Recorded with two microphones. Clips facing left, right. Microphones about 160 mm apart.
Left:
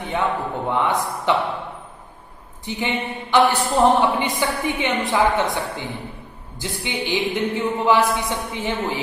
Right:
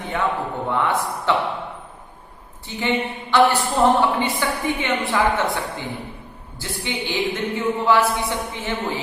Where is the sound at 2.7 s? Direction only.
15° left (ahead or behind).